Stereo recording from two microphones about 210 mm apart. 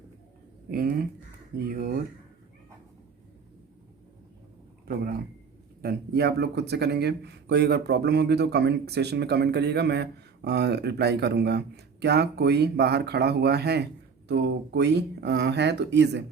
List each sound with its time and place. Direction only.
0.7 s speech: 45° right (ahead or behind)
5.8 s speech: 50° right (ahead or behind)